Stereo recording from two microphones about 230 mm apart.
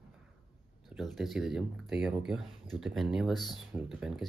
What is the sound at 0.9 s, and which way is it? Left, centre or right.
Speech, centre.